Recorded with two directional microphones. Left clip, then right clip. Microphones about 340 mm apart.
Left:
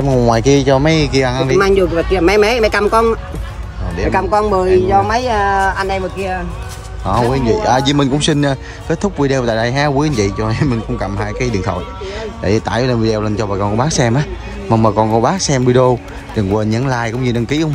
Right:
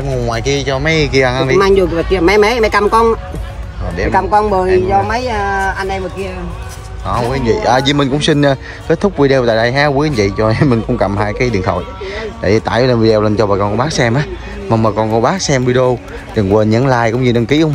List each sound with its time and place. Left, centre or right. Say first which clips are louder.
0.0 s speech: left 5 dB; centre
7.3 s speech: right 1 dB; centre